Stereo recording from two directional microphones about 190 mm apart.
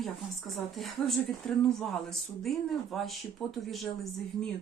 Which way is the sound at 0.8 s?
Centre (ahead or behind).